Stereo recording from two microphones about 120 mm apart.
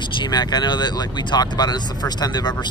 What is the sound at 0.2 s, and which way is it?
Speech, 40° left (ahead or behind).